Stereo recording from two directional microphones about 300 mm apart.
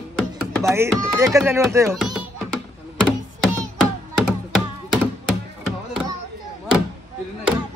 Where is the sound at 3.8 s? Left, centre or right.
Centre.